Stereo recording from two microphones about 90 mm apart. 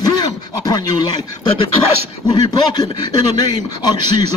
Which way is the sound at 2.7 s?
55° left (ahead or behind).